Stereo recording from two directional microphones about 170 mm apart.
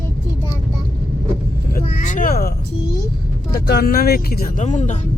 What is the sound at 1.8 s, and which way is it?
Music, 40° left (ahead or behind).